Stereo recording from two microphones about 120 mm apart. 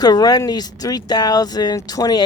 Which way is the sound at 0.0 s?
30° left (ahead or behind).